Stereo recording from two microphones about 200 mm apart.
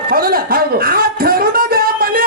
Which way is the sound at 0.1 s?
50° right (ahead or behind).